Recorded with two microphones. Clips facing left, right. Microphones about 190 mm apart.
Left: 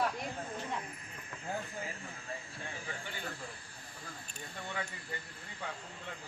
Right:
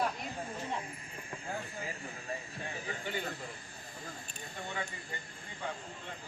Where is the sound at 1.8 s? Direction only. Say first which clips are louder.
Right 2 dB; 15° right (ahead or behind).